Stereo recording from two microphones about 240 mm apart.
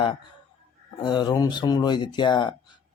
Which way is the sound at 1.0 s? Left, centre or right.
Centre.